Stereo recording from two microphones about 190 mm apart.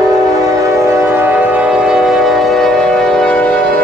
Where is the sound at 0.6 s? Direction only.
15° right (ahead or behind); by 3.5 s 5° left (ahead or behind).